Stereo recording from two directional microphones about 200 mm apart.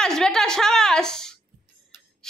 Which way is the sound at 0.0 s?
5° left (ahead or behind).